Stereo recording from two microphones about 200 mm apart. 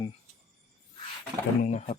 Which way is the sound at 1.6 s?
35° left (ahead or behind).